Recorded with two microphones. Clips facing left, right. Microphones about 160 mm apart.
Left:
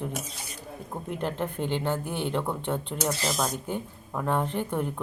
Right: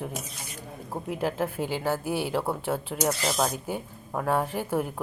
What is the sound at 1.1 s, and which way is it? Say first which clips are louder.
A woman's voice: right 2 dB; 5° right (ahead or behind).